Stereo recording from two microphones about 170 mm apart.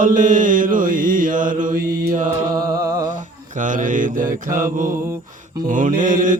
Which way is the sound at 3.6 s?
50° right (ahead or behind).